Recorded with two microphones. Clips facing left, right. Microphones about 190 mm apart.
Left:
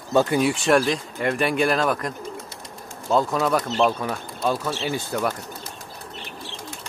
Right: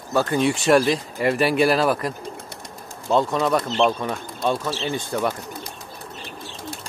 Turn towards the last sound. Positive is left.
turn(degrees=-10)  # may be behind; listen again after turning